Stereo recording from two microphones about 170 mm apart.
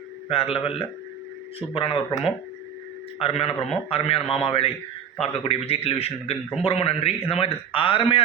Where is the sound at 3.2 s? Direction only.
35° left (ahead or behind).